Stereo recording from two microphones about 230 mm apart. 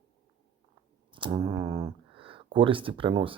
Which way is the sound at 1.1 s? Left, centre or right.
Centre.